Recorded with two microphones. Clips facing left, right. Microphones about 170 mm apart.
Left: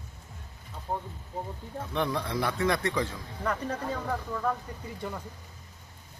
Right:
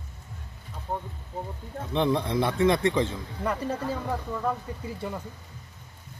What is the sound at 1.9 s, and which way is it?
Speech, 20° right (ahead or behind).